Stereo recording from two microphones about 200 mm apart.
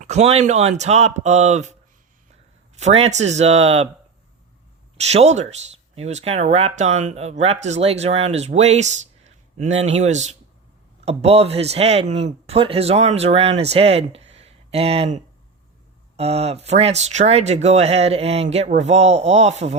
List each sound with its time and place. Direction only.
0.0 s speech: 35° right (ahead or behind)
2.7 s speech: 30° right (ahead or behind)
4.9 s speech: 35° right (ahead or behind)